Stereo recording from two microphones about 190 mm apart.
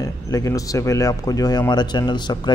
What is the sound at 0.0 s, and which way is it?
Speech, 15° left (ahead or behind).